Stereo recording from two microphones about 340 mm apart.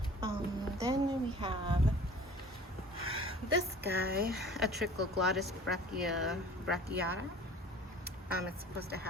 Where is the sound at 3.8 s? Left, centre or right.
Right.